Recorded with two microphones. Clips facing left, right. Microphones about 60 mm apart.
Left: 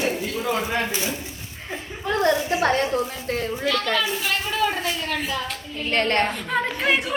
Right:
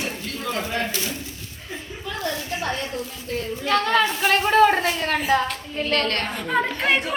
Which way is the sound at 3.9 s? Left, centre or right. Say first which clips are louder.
Right 5 dB; right.